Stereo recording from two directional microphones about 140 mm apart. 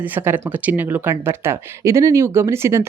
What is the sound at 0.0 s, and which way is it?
Speech, 15° right (ahead or behind).